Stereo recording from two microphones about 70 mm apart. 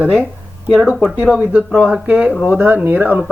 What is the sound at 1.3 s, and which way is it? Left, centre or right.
A man's voice, centre.